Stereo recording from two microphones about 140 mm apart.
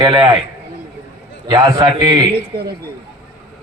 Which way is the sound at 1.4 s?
30° right (ahead or behind).